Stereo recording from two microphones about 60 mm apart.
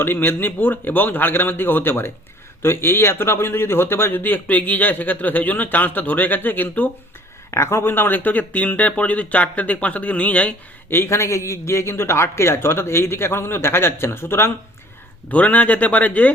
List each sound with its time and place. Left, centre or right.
0.0 s a man's voice: left
7.5 s speech: left
10.8 s speech: left
15.3 s speech: left